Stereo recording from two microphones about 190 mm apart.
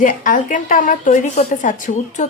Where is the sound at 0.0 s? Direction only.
45° left (ahead or behind).